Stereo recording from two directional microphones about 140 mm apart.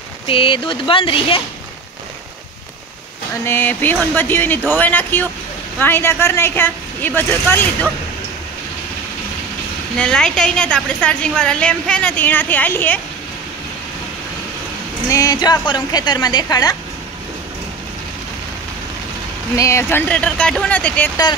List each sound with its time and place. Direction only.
0.3 s speech: 40° left (ahead or behind)
3.4 s a woman's voice: 15° left (ahead or behind)
9.9 s a woman's voice: 5° left (ahead or behind)
15.0 s speech: 25° left (ahead or behind)
19.5 s a woman's voice: 20° left (ahead or behind)